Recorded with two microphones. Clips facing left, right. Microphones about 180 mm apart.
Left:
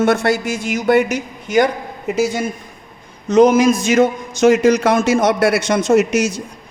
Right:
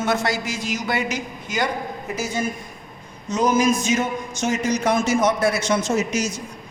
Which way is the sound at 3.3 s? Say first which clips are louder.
Left 8 dB; 90° left.